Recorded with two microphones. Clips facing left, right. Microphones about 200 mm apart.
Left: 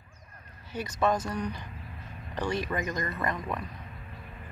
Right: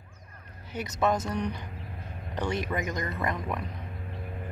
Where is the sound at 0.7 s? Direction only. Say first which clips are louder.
Even; 20° right (ahead or behind).